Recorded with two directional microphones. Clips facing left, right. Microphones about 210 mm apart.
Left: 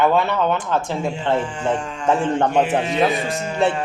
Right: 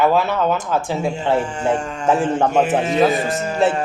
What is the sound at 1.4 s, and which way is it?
Speech, 45° right (ahead or behind).